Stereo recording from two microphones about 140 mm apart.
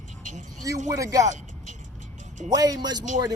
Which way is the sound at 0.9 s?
25° right (ahead or behind).